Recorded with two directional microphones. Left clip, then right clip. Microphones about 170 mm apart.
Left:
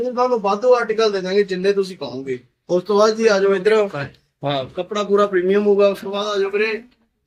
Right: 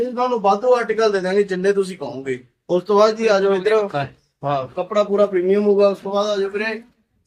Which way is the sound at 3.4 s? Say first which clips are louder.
Left 1 dB; 25° left (ahead or behind).